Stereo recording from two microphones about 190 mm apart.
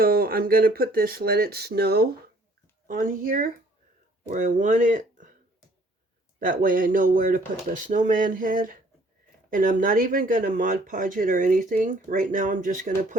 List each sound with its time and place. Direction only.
0.0 s speech: 50° right (ahead or behind)
2.8 s speech: 45° right (ahead or behind)
6.4 s speech: 45° right (ahead or behind)